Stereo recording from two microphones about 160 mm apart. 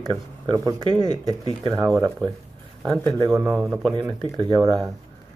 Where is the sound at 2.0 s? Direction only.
15° right (ahead or behind).